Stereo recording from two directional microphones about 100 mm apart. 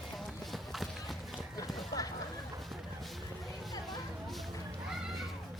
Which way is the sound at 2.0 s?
35° left (ahead or behind).